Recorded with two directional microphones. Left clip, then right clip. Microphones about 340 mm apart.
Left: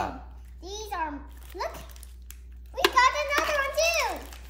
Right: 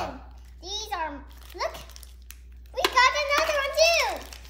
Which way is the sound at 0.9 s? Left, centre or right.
Centre.